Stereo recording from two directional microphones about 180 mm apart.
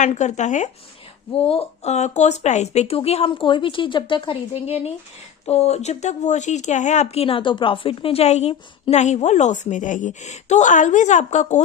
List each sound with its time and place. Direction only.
0.0 s speech: 40° left (ahead or behind)